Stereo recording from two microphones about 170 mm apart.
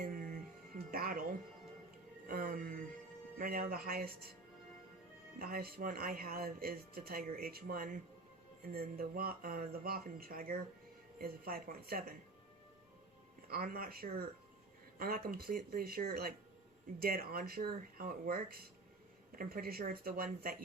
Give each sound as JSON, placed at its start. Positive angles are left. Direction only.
{"t": 0.9, "sound": "music", "side_deg": -60}
{"t": 3.3, "sound": "speech", "side_deg": -55}
{"t": 5.4, "sound": "speech", "side_deg": -60}
{"t": 13.5, "sound": "speech", "side_deg": -60}